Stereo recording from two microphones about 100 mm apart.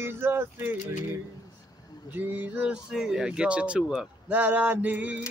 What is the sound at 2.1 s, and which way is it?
Speech, 20° right (ahead or behind).